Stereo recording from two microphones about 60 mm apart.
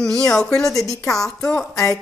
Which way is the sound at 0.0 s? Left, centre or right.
Centre.